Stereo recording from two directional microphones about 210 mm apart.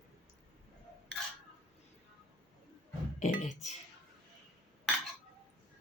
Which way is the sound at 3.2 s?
35° left (ahead or behind).